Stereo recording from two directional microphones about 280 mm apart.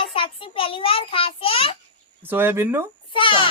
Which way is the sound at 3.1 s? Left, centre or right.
Centre.